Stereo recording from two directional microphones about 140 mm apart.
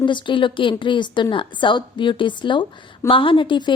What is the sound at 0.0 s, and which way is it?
A woman's voice, 35° left (ahead or behind).